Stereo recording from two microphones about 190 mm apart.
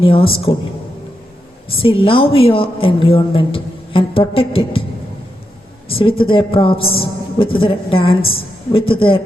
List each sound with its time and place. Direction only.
0.0 s a woman's voice: 30° left (ahead or behind)
1.7 s a woman's voice: 30° left (ahead or behind)
5.9 s a woman's voice: 30° left (ahead or behind)